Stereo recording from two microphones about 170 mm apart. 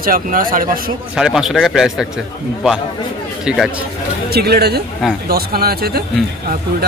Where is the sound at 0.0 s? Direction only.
55° right (ahead or behind).